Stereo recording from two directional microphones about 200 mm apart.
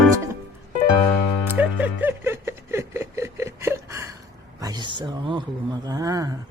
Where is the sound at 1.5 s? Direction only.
10° right (ahead or behind).